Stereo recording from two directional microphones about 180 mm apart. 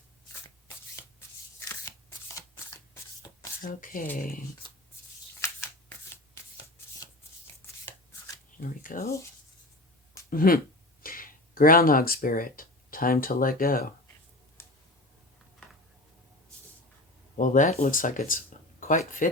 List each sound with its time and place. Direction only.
1.5 s shuffling cards: 15° left (ahead or behind)
3.6 s speech: 50° left (ahead or behind)
4.6 s sanding: 25° left (ahead or behind)
5.4 s shuffling cards: 15° left (ahead or behind)
8.5 s speech: 50° left (ahead or behind)
10.2 s speech: 50° left (ahead or behind)
14.6 s a sound: 15° left (ahead or behind)
17.3 s speech: 45° left (ahead or behind)